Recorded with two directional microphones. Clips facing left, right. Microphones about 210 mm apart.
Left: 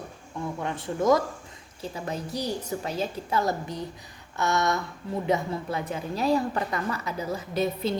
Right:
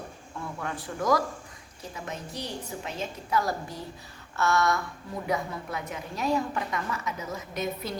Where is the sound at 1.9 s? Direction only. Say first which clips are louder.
Left 5 dB; 35° left (ahead or behind).